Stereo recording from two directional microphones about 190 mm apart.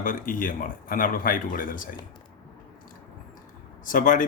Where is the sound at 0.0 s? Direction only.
45° left (ahead or behind).